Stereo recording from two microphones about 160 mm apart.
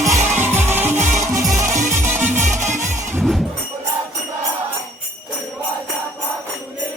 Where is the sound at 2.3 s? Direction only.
50° right (ahead or behind).